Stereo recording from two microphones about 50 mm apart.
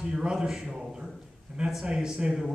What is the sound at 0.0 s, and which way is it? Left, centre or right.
A man's voice, centre.